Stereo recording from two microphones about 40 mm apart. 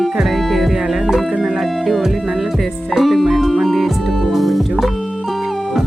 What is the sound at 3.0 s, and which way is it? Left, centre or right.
Music, centre.